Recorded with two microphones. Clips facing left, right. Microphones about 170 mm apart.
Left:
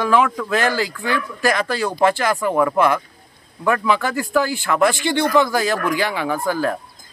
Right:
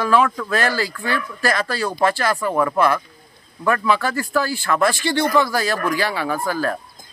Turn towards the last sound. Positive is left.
turn(degrees=15)  # may be behind; listen again after turning